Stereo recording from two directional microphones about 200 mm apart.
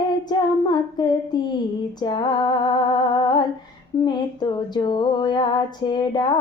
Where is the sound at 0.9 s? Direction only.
20° left (ahead or behind).